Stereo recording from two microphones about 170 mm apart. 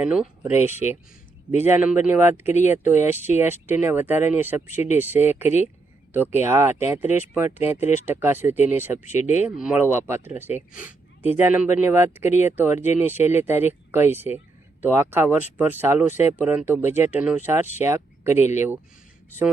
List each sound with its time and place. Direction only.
0.0 s speech: 5° right (ahead or behind)
0.7 s speech: 40° left (ahead or behind)
1.6 s speech: 10° right (ahead or behind)
2.5 s speech: 45° left (ahead or behind)
2.7 s speech: 15° right (ahead or behind)
4.7 s speech: 45° left (ahead or behind)
4.9 s speech: 10° right (ahead or behind)
7.8 s speech: 40° left (ahead or behind)
8.0 s speech: 10° right (ahead or behind)
9.0 s speech: 45° left (ahead or behind)
9.6 s speech: 10° right (ahead or behind)
18.3 s speech: 40° left (ahead or behind)